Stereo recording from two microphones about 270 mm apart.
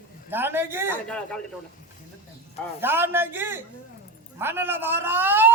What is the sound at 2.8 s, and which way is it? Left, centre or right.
Speech, centre.